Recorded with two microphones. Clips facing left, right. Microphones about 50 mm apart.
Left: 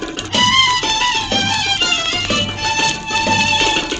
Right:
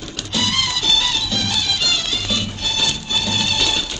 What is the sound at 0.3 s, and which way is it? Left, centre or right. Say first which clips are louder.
Music: left 8 dB; left.